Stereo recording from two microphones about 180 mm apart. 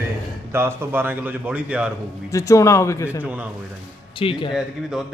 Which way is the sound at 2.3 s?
15° left (ahead or behind).